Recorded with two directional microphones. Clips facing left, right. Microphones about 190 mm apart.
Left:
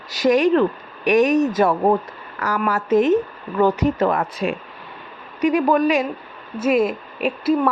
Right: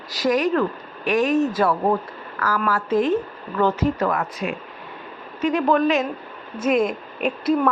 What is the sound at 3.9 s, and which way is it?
Speech, 30° left (ahead or behind).